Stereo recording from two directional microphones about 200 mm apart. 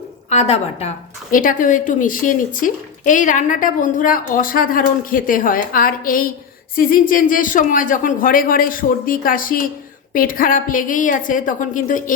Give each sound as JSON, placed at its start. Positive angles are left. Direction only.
{"t": 0.3, "sound": "a woman's voice", "side_deg": 35}